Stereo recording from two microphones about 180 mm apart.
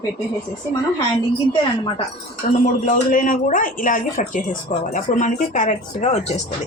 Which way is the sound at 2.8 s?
45° left (ahead or behind).